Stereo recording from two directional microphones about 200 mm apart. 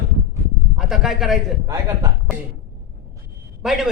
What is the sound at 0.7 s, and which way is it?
Speech, centre (ahead or behind).